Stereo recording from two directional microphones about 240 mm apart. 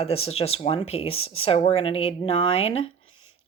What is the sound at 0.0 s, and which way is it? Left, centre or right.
Speech, left.